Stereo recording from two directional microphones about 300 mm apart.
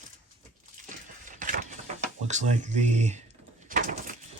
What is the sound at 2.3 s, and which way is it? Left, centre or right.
Speech, right.